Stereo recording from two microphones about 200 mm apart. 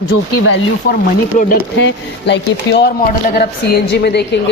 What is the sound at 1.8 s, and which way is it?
A woman's voice, 60° left (ahead or behind).